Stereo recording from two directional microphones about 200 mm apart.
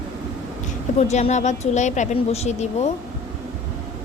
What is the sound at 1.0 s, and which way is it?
Speech, 35° left (ahead or behind).